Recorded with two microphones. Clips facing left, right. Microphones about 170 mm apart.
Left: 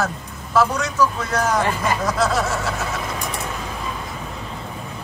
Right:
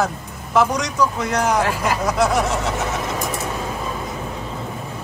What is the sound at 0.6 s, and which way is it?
A man's voice, 15° right (ahead or behind).